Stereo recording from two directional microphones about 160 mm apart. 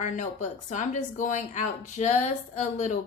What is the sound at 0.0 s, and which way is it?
Speech, 50° left (ahead or behind).